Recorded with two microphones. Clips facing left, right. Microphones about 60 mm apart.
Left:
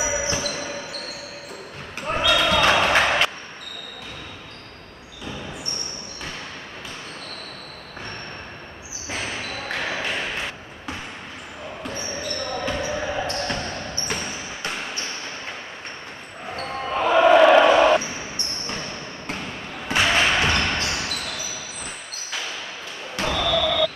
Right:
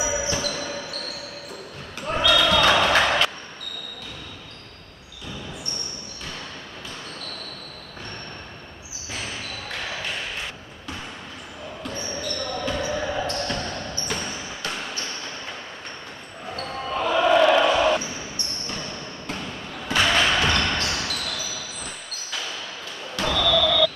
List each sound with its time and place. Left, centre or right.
0.0 s music: left
2.0 s basketball bounce: left
9.1 s a sound: left
11.8 s basketball bounce: centre
16.4 s basketball bounce: left
23.1 s basketball bounce: centre